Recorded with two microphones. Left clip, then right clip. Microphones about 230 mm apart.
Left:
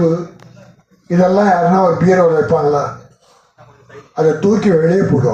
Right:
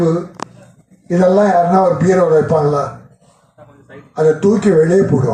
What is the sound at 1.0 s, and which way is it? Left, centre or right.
A man's voice, right.